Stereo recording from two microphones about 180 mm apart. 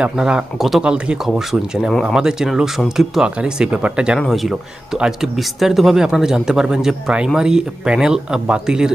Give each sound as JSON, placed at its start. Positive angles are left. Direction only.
{"t": 0.0, "sound": "speech", "side_deg": -5}